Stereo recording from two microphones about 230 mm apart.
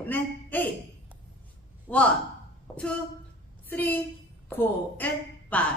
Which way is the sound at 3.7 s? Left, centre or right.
Centre.